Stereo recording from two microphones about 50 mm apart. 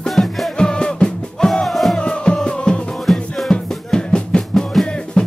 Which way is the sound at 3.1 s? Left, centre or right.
Centre.